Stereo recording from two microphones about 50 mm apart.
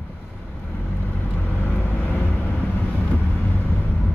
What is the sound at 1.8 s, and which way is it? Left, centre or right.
Vehicle, left.